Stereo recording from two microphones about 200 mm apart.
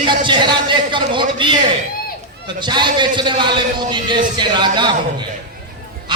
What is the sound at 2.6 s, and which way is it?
A man's voice, 20° right (ahead or behind).